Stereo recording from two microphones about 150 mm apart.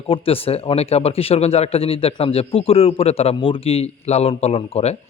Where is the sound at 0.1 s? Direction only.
40° left (ahead or behind).